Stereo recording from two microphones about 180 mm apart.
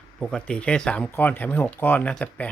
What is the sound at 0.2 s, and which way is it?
Speech, 5° left (ahead or behind).